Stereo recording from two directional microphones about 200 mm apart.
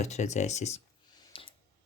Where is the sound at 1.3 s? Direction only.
25° left (ahead or behind).